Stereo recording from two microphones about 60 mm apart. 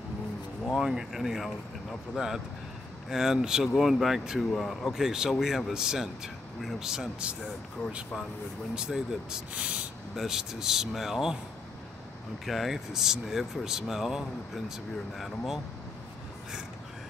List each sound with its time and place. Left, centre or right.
0.7 s speech: centre
8.7 s speech: centre
9.5 s a sound: right
10.1 s speech: centre
12.4 s speech: centre